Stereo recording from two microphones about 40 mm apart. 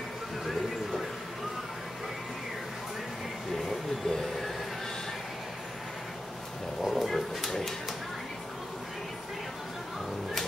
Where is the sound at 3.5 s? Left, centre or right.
Centre.